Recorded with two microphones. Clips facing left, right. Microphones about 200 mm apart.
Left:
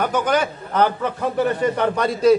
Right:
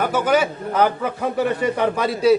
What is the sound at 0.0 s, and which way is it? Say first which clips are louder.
A man's voice: right 1 dB; 5° right (ahead or behind).